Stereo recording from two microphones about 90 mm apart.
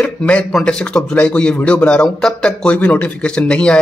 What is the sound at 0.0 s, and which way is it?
A man's voice, 15° left (ahead or behind).